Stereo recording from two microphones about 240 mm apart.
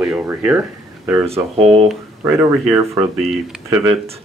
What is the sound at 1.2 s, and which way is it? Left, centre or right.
Speech, right.